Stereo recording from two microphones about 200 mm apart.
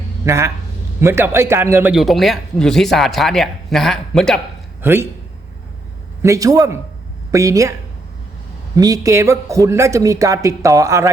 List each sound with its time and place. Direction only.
0.3 s a man's voice: 15° right (ahead or behind); by 4.4 s centre (ahead or behind)
4.8 s speech: 10° right (ahead or behind)
6.2 s a man's voice: 15° right (ahead or behind)
8.7 s a man's voice: 20° right (ahead or behind)